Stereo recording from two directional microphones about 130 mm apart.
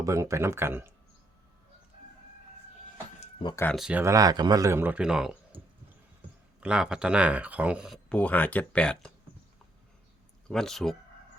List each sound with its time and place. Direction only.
0.0 s a man's voice: 25° right (ahead or behind)
3.8 s speech: 5° right (ahead or behind)
4.0 s a man's voice: 25° right (ahead or behind); by 5.4 s 5° right (ahead or behind)
6.6 s speech: 5° right (ahead or behind)
8.1 s speech: 10° left (ahead or behind)
10.5 s speech: 5° left (ahead or behind)